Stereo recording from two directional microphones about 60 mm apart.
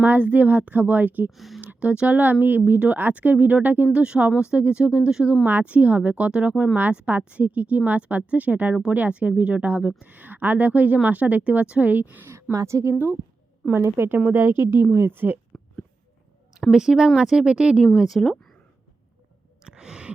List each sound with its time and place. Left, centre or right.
0.0 s speech: right
1.3 s speech: centre
1.6 s speech: right
6.7 s speech: right
12.3 s a woman's voice: right
16.7 s speech: centre
17.8 s speech: centre
19.6 s sigh: centre